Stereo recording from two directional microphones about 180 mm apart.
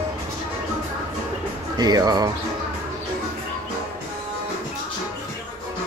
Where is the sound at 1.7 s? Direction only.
20° right (ahead or behind).